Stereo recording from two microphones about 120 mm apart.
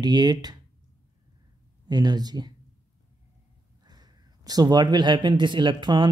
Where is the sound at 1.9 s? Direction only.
35° right (ahead or behind).